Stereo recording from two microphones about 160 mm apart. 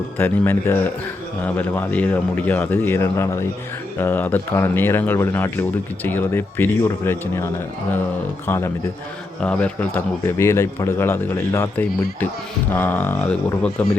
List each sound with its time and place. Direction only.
0.2 s speech: 10° left (ahead or behind)
8.4 s speech: 15° left (ahead or behind)